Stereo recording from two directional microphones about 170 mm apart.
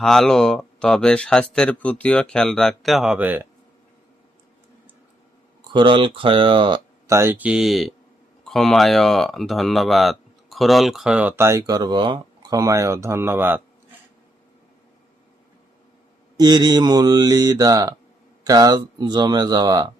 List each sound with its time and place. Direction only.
0.0 s speech: centre (ahead or behind)
5.7 s mantra: 30° right (ahead or behind)
7.2 s speech: 10° right (ahead or behind)
16.4 s mantra: 25° right (ahead or behind)